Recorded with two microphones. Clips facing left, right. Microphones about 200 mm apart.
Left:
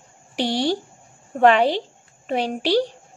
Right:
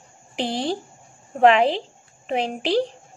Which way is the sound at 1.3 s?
40° left (ahead or behind).